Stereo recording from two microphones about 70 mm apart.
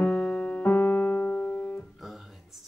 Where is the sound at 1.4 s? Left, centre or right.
Left.